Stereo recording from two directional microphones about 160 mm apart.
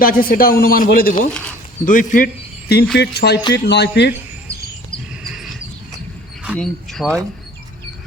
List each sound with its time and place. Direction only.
0.0 s speech: 65° left (ahead or behind)
1.3 s speech: 5° left (ahead or behind)
1.8 s speech: 55° left (ahead or behind)
2.9 s speech: 90° left
4.9 s a sound: centre (ahead or behind)
6.6 s speech: 5° left (ahead or behind)